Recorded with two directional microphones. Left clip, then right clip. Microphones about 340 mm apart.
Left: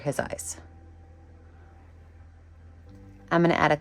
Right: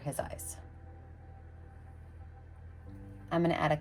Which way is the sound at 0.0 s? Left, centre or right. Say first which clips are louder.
Left 9 dB; left.